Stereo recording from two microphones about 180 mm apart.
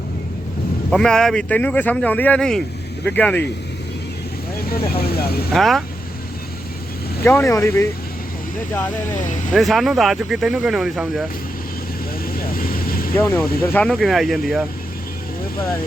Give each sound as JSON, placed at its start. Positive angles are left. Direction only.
{"t": 0.9, "sound": "speech", "side_deg": 5}
{"t": 4.9, "sound": "speech", "side_deg": 60}
{"t": 5.5, "sound": "speech", "side_deg": 0}
{"t": 7.3, "sound": "speech", "side_deg": 15}
{"t": 9.5, "sound": "speech", "side_deg": 0}
{"t": 12.5, "sound": "vehicle", "side_deg": 55}
{"t": 13.1, "sound": "speech", "side_deg": 15}